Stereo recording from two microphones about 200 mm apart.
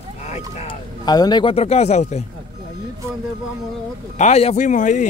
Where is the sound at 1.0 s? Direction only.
20° left (ahead or behind).